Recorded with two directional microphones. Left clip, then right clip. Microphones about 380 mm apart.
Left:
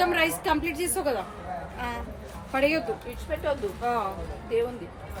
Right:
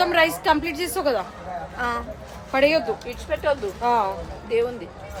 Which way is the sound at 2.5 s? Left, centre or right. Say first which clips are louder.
Right 6 dB; centre.